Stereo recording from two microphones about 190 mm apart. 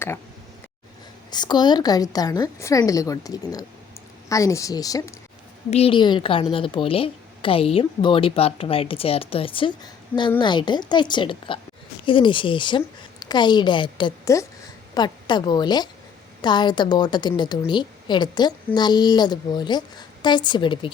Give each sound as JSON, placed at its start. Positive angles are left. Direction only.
{"t": 1.3, "sound": "a woman's voice", "side_deg": 20}
{"t": 5.7, "sound": "a woman's voice", "side_deg": 30}